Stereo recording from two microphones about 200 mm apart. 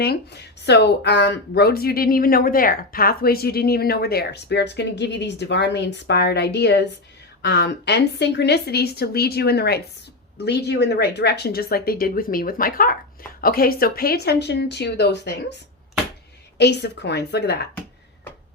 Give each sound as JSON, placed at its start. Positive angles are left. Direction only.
{"t": 0.0, "sound": "speech", "side_deg": 55}